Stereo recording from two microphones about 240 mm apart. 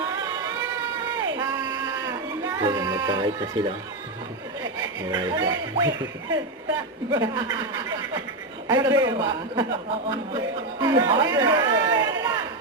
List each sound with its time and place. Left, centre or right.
1.4 s a sound: centre
2.6 s speech: centre
4.8 s speech: centre
10.8 s speech: centre